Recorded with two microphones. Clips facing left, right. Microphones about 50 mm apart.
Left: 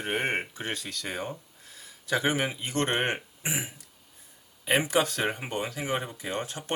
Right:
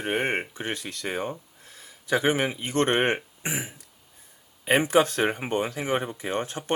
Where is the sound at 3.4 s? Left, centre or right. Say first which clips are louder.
Right 2 dB; right.